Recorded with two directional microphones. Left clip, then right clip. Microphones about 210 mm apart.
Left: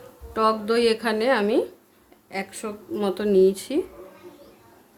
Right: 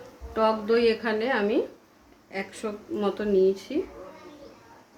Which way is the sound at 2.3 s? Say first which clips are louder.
Left 2 dB; 35° left (ahead or behind).